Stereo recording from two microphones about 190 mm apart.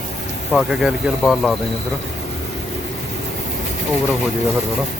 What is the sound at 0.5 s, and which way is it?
Speech, centre (ahead or behind).